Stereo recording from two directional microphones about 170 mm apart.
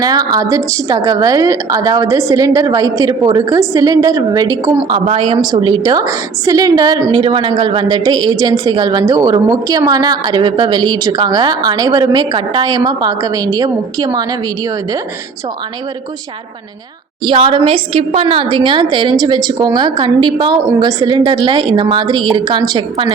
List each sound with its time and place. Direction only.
0.0 s a woman's voice: 20° right (ahead or behind)
4.9 s a woman's voice: 30° right (ahead or behind)
17.2 s a woman's voice: 30° right (ahead or behind)